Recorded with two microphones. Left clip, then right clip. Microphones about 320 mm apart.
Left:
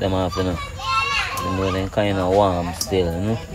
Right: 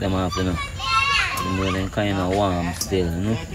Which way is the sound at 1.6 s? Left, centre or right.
Centre.